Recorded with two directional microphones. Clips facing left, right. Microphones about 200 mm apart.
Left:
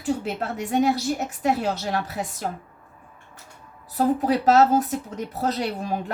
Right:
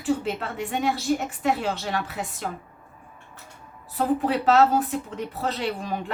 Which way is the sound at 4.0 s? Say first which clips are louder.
Left 2 dB; 40° left (ahead or behind).